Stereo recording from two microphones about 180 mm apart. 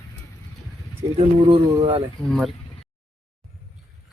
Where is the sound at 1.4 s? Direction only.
30° right (ahead or behind).